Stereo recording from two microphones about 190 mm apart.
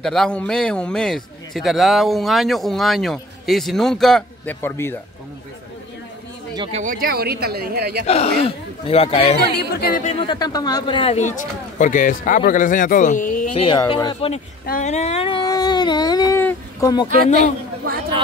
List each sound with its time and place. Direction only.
0.0 s a man's voice: 5° left (ahead or behind)
6.7 s speech: 45° right (ahead or behind)
8.1 s speech: 30° left (ahead or behind)
9.6 s speech: 55° left (ahead or behind)
10.0 s speech: 30° left (ahead or behind); by 13.5 s 45° left (ahead or behind)
13.6 s speech: 25° left (ahead or behind)
14.7 s speech: 40° left (ahead or behind); by 16.9 s 15° left (ahead or behind)